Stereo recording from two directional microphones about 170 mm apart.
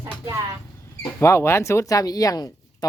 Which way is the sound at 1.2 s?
15° left (ahead or behind).